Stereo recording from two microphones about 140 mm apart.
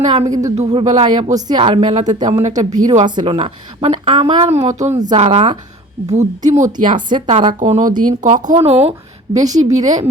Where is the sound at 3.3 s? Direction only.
50° right (ahead or behind).